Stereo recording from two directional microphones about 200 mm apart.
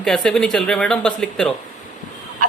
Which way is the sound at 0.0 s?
5° left (ahead or behind).